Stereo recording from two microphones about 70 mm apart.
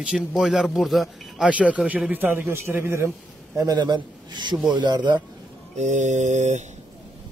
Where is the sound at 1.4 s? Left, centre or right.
Centre.